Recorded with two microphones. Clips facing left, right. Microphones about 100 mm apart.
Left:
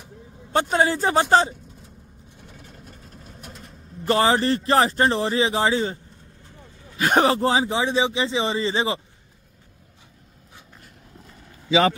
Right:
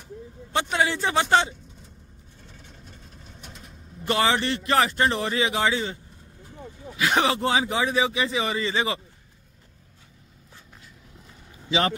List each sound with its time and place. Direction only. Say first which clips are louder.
0.5 s speech: left 4 dB; 40° left (ahead or behind)
2.4 s vehicle: left 4 dB; 5° left (ahead or behind)
4.0 s speech: left 4 dB; 35° left (ahead or behind)
7.0 s speech: left 4 dB; 45° left (ahead or behind); by 9.0 s 30° left (ahead or behind)